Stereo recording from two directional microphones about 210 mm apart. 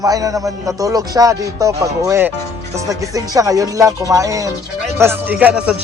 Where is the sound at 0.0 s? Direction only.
15° right (ahead or behind).